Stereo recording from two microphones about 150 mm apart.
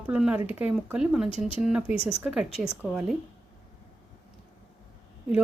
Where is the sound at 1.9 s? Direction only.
40° left (ahead or behind).